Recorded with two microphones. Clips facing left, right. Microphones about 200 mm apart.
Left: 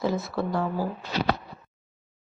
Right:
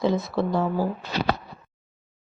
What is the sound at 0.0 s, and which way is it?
Speech, 20° right (ahead or behind).